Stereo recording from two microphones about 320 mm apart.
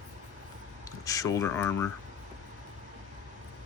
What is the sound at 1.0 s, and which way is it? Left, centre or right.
Speech, centre.